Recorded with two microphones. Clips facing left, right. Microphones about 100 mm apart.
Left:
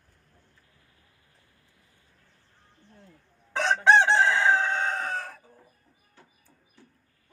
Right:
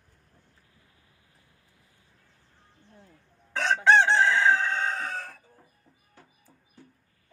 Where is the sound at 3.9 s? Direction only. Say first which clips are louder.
Even; 20° left (ahead or behind).